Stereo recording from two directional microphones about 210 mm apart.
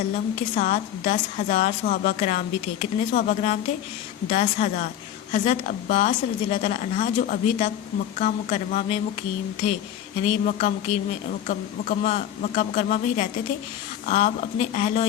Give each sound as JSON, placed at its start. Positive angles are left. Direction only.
{"t": 0.5, "sound": "a woman's voice", "side_deg": 35}
{"t": 10.2, "sound": "a woman's voice", "side_deg": 35}